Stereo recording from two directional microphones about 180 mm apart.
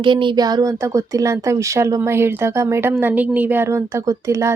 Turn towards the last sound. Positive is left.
turn(degrees=-15)  # may be behind; listen again after turning